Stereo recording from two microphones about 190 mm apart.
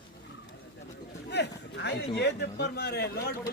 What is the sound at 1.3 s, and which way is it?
A man's voice, 65° left (ahead or behind).